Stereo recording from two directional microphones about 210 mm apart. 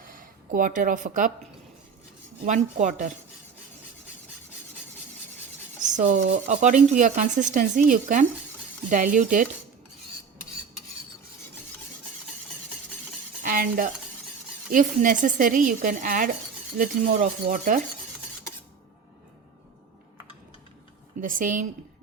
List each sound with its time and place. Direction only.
0.0 s speech: 40° right (ahead or behind)
2.4 s speech: 35° right (ahead or behind)
5.8 s speech: 35° right (ahead or behind)
13.4 s stir: 40° right (ahead or behind)
14.7 s speech: 40° right (ahead or behind)
21.2 s speech: 40° right (ahead or behind)